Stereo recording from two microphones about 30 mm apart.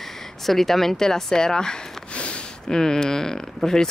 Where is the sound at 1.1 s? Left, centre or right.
Left.